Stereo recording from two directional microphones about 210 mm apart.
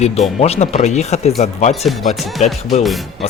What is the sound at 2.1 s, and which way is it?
Speech, centre (ahead or behind).